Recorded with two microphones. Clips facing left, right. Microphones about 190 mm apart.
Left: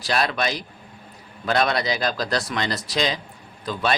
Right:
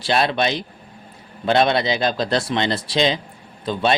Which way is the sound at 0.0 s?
25° right (ahead or behind).